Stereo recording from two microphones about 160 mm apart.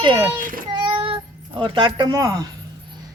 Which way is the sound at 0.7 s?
30° right (ahead or behind).